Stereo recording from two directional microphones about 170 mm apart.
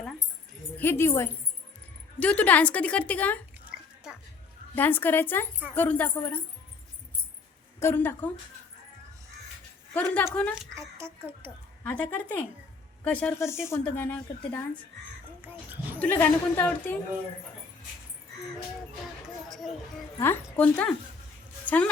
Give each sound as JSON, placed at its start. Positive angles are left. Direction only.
{"t": 0.8, "sound": "a woman's voice", "side_deg": 15}
{"t": 4.7, "sound": "a woman's voice", "side_deg": 10}
{"t": 7.8, "sound": "a woman's voice", "side_deg": 15}
{"t": 9.9, "sound": "a woman's voice", "side_deg": 10}
{"t": 10.8, "sound": "a woman's voice", "side_deg": -15}
{"t": 11.8, "sound": "a woman's voice", "side_deg": 10}
{"t": 16.0, "sound": "a woman's voice", "side_deg": 10}
{"t": 19.5, "sound": "speech", "side_deg": 0}
{"t": 20.1, "sound": "a woman's voice", "side_deg": 15}